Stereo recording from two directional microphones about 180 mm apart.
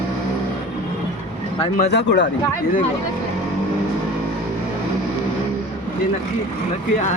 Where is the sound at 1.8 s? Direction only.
70° left (ahead or behind).